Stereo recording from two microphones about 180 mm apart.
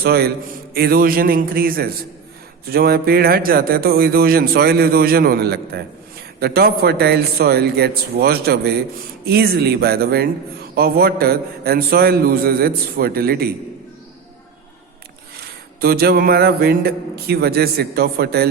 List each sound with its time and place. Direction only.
0.0 s speech: 60° right (ahead or behind)
15.4 s speech: 55° right (ahead or behind)